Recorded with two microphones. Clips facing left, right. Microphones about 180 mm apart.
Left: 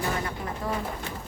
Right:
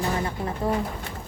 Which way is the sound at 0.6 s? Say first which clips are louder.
Right 6 dB; 25° right (ahead or behind).